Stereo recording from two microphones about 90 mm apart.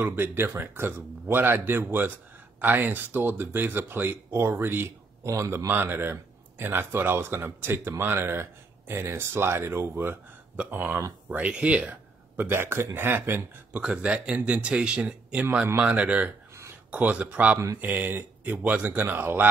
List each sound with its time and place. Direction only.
0.0 s a man's voice: 25° right (ahead or behind)
13.7 s speech: 10° right (ahead or behind)